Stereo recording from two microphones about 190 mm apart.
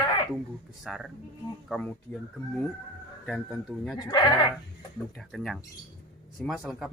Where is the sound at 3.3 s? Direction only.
Centre (ahead or behind).